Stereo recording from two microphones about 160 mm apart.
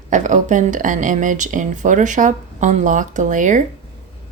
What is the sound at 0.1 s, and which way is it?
Speech, 50° right (ahead or behind).